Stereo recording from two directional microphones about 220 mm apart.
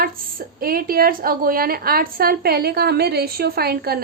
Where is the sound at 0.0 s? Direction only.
40° right (ahead or behind).